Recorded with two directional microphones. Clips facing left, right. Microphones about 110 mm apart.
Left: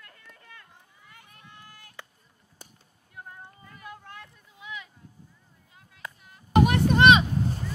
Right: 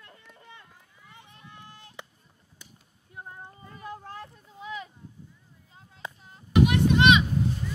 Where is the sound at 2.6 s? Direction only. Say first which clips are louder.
Left 2 dB; 40° left (ahead or behind).